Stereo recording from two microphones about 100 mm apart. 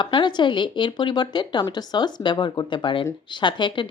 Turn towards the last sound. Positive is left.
turn(degrees=55)  # may be behind; listen again after turning